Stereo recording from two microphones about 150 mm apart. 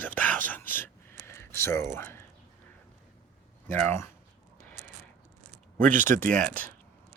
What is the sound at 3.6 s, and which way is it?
Speech, 15° left (ahead or behind).